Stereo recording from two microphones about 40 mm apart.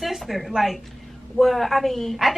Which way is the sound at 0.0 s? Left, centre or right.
Centre.